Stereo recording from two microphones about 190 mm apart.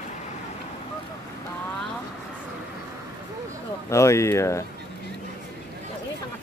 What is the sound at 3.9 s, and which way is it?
Speech, 15° left (ahead or behind).